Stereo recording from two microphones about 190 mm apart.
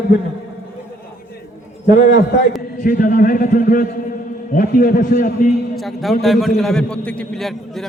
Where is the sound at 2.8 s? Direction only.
50° left (ahead or behind).